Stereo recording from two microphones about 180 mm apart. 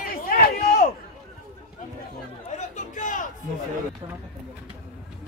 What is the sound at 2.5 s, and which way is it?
Chatter, 45° left (ahead or behind).